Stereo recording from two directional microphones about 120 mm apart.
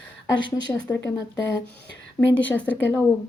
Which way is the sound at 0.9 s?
20° left (ahead or behind).